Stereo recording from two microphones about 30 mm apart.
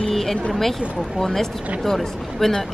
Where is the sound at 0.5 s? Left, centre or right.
Centre.